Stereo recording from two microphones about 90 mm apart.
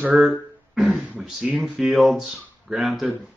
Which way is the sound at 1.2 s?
10° right (ahead or behind).